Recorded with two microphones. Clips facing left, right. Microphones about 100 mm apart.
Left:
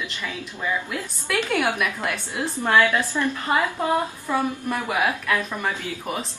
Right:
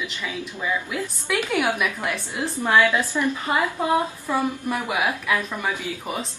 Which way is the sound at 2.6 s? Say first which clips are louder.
Even; 15° right (ahead or behind).